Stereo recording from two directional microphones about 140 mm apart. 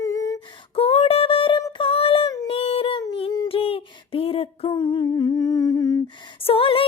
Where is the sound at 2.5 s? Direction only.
45° left (ahead or behind); by 6.0 s 25° left (ahead or behind).